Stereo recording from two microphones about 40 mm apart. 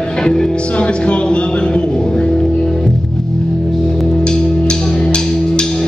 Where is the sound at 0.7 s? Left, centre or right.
Left.